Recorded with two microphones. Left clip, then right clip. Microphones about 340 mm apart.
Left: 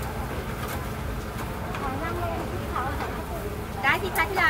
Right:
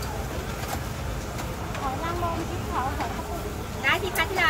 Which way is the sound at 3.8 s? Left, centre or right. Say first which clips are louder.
Left 1 dB; centre.